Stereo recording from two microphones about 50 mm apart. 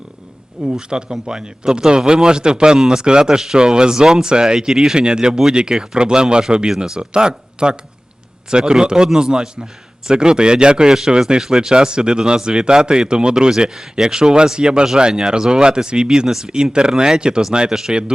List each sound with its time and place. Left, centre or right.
0.6 s speech: centre